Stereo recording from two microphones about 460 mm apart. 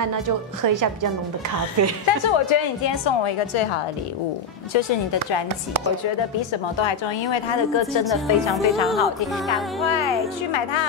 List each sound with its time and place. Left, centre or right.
0.0 s speech: right
2.0 s a woman's voice: left
6.8 s a woman's voice: left
8.0 s a woman's voice: centre
10.5 s a woman's voice: left